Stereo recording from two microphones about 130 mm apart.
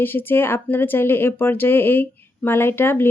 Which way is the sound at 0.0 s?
15° left (ahead or behind).